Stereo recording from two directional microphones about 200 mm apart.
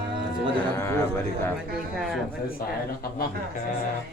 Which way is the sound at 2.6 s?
45° left (ahead or behind).